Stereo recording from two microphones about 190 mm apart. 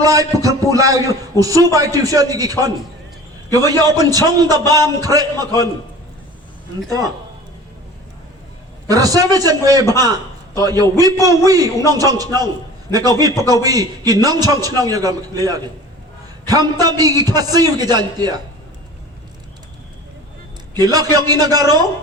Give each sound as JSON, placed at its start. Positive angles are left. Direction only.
{"t": 0.0, "sound": "a man's voice", "side_deg": -20}
{"t": 8.9, "sound": "a man's voice", "side_deg": -20}
{"t": 16.8, "sound": "a man's voice", "side_deg": -20}
{"t": 20.7, "sound": "a man's voice", "side_deg": -20}